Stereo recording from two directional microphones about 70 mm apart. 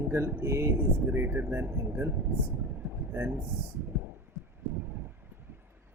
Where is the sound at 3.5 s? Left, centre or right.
Right.